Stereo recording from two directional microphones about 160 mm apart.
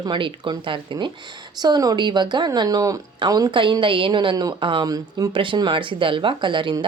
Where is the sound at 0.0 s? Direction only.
30° right (ahead or behind).